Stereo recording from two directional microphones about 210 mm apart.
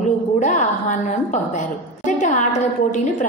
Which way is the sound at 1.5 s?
35° left (ahead or behind).